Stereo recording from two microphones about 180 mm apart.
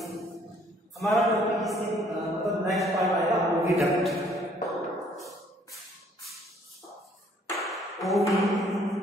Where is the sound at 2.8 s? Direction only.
Centre (ahead or behind).